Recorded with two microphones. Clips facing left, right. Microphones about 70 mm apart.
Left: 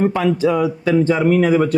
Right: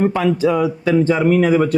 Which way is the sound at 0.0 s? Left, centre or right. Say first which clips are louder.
Even; right.